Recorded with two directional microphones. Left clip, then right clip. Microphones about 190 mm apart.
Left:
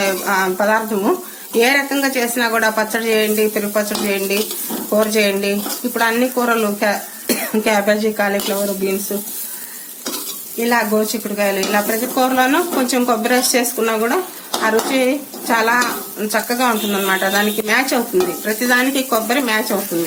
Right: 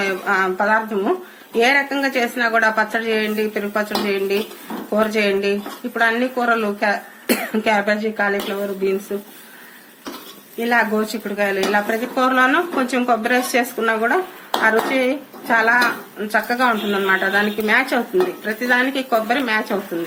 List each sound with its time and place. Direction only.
0.0 s stir: 40° left (ahead or behind)
10.6 s stir: 35° left (ahead or behind)